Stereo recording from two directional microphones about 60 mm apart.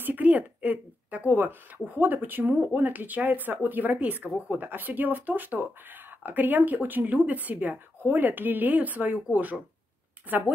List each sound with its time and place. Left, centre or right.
0.0 s speech: right